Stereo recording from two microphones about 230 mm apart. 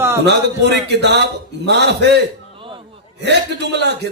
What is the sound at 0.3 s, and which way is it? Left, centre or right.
A man's voice, right.